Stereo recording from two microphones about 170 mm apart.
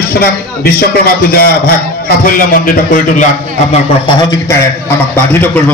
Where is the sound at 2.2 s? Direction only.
55° left (ahead or behind).